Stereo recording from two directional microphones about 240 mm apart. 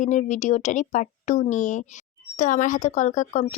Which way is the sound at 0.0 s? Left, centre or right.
Left.